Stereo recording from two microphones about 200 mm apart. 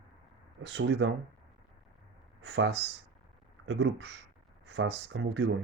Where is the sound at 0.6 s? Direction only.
60° right (ahead or behind).